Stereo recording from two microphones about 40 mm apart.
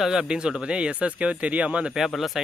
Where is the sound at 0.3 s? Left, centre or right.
Right.